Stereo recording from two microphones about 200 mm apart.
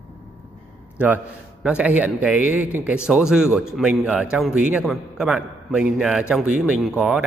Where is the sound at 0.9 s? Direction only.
10° right (ahead or behind).